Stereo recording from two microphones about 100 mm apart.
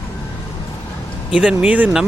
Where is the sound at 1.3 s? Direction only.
10° right (ahead or behind).